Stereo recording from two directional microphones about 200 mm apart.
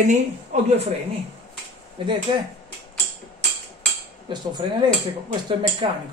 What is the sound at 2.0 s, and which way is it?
Speech, 25° right (ahead or behind).